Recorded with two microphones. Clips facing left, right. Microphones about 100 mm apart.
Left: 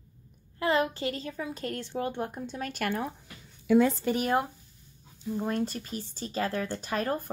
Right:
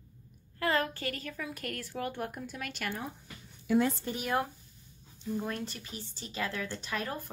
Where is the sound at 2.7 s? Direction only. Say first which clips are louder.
Left 8 dB; 50° left (ahead or behind).